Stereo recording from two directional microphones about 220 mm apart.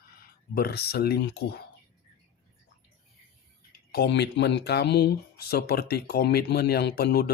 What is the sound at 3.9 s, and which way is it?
Speech, 50° left (ahead or behind).